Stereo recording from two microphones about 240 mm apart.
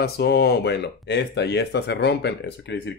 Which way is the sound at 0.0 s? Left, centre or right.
Left.